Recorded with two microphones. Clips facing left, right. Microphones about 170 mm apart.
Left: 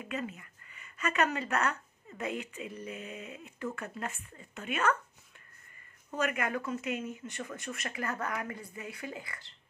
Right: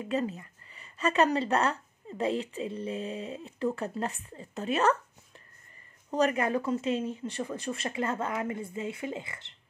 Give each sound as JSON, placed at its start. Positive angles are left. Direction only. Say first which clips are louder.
{"t": 0.0, "sound": "speech", "louder": "right 7 dB", "side_deg": -30}
{"t": 6.0, "sound": "speech", "louder": "right 6 dB", "side_deg": -35}